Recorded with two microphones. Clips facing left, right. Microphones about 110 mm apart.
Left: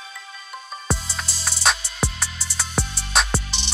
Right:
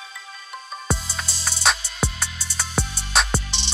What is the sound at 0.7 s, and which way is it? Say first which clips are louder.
Music: even; centre (ahead or behind).